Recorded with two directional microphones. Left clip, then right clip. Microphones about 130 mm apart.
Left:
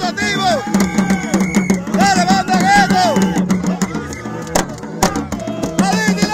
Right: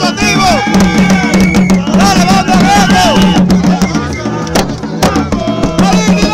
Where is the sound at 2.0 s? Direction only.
30° left (ahead or behind).